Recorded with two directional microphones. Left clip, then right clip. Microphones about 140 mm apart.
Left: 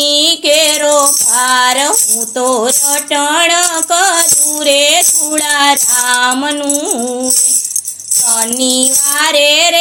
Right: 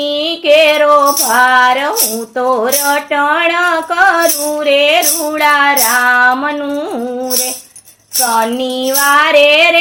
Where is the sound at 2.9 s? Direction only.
30° left (ahead or behind).